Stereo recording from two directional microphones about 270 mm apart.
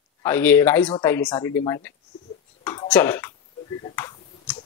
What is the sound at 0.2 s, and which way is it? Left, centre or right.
Speech, centre.